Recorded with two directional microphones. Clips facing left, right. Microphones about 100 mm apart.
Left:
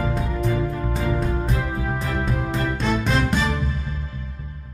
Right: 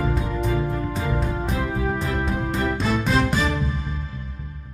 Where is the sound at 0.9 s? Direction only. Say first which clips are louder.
Left 2 dB; centre (ahead or behind).